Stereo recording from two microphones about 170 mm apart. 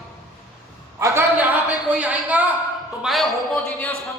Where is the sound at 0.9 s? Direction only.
15° right (ahead or behind).